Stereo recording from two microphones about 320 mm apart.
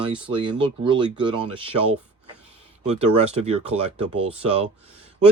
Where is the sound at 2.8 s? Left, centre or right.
Centre.